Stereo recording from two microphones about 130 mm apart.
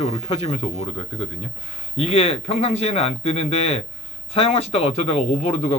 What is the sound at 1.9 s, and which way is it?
Speech, 50° left (ahead or behind).